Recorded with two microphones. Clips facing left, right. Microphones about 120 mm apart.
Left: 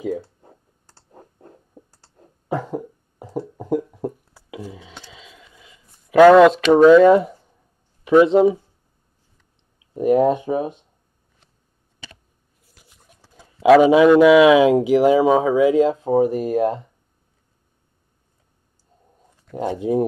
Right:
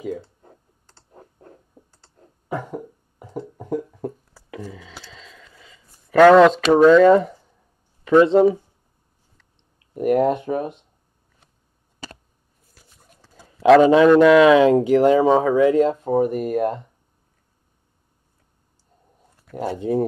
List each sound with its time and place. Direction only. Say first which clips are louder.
0.0 s computer keyboard: left 3 dB; 10° left (ahead or behind)
2.6 s a sound: left 4 dB; 20° left (ahead or behind); by 6.6 s 5° left (ahead or behind)
6.7 s speech: left 2 dB; 5° left (ahead or behind)
9.9 s speech: left 2 dB; 5° left (ahead or behind)
12.7 s speech: even; 10° left (ahead or behind)
19.8 s speech: left 1 dB; 15° left (ahead or behind)